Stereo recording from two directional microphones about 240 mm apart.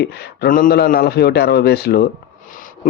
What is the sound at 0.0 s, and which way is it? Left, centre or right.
Speech, left.